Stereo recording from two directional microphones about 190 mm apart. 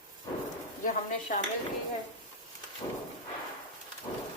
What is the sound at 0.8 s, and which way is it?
Speech, 45° left (ahead or behind).